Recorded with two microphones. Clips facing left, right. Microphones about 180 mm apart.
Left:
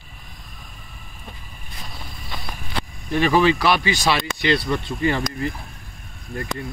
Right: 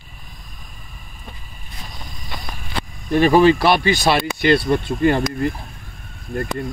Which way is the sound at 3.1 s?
40° right (ahead or behind).